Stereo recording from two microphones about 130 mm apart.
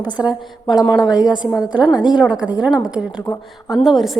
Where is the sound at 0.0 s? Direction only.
5° right (ahead or behind).